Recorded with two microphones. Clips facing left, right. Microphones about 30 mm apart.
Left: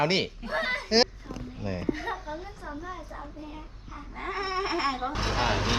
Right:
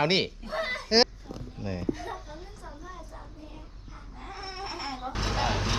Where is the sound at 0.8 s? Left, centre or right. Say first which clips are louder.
Right 1 dB; centre.